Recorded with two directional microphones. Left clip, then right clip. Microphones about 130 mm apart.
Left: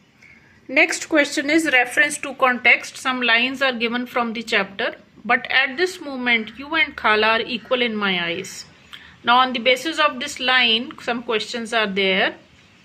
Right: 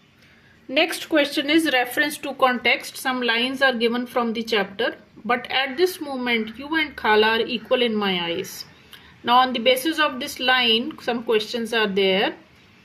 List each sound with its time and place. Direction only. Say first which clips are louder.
0.7 s speech: left 3 dB; 5° left (ahead or behind)
1.7 s a woman's voice: left 4 dB; 30° right (ahead or behind)
2.4 s a woman's voice: left 3 dB; 15° right (ahead or behind)